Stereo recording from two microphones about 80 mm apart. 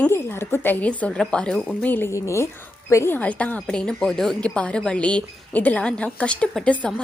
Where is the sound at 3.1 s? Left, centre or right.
Centre.